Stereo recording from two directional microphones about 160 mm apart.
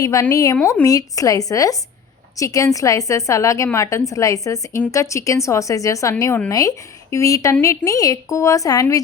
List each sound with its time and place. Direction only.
0.0 s a woman's voice: 20° left (ahead or behind)